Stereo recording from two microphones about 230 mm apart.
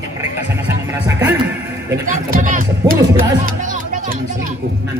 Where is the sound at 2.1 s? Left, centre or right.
Right.